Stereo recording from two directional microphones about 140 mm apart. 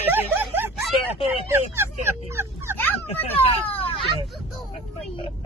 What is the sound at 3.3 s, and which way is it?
Speech, 45° left (ahead or behind).